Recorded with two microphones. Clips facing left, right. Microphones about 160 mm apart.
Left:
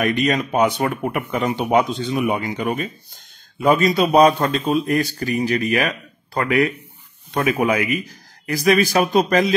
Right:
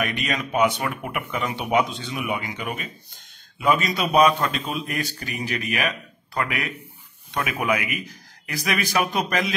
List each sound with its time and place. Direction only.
0.2 s a man's voice: 40° left (ahead or behind)